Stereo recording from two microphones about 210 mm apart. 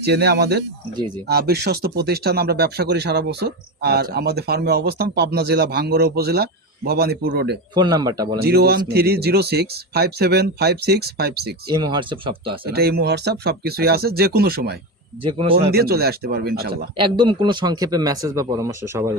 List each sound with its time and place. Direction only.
0.0 s speech: 50° right (ahead or behind)
7.7 s speech: 20° right (ahead or behind)
8.4 s speech: 50° right (ahead or behind)
11.7 s speech: 20° right (ahead or behind)
12.6 s speech: 50° right (ahead or behind)
15.2 s speech: 25° right (ahead or behind)
15.7 s speech: 50° right (ahead or behind)
17.0 s a man's voice: 20° right (ahead or behind)